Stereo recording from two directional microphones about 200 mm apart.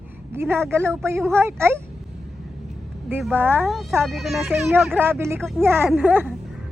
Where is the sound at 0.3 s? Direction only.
10° right (ahead or behind).